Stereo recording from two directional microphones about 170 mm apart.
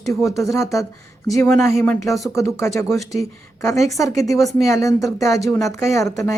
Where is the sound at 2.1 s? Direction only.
Centre (ahead or behind).